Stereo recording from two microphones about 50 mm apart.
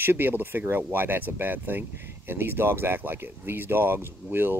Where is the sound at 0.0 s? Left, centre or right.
Right.